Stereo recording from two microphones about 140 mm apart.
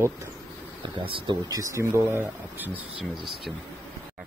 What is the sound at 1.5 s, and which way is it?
A man's voice, 25° right (ahead or behind).